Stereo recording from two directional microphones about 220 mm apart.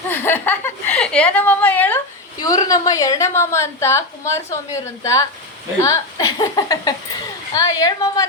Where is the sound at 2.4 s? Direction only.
15° left (ahead or behind).